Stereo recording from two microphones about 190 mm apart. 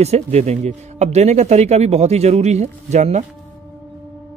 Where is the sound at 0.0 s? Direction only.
35° right (ahead or behind).